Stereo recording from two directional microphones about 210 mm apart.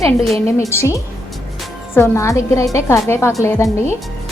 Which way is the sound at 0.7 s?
15° left (ahead or behind).